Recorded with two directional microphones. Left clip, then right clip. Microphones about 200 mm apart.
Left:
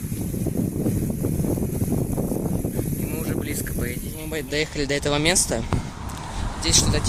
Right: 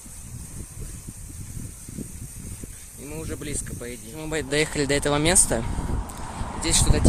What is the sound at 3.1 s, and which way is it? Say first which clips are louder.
Speech: left 2 dB; centre (ahead or behind).